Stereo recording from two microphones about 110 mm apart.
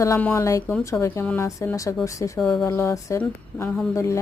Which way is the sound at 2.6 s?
25° left (ahead or behind).